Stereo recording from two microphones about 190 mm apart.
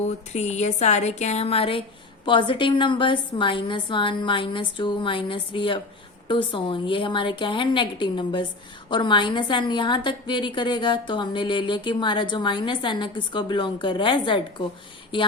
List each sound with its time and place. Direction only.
0.3 s a woman's voice: 35° left (ahead or behind)